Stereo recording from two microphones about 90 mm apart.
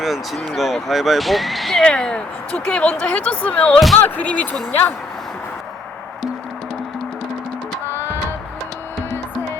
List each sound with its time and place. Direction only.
0.0 s speech: centre (ahead or behind); by 4.9 s 15° left (ahead or behind)
7.9 s music: 25° right (ahead or behind)